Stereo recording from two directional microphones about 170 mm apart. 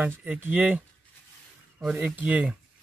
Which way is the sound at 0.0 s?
10° right (ahead or behind).